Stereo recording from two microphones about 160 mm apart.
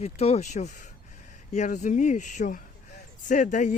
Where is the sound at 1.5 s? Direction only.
50° left (ahead or behind).